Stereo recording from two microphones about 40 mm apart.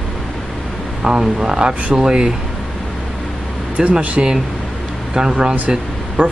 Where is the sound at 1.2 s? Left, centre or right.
Centre.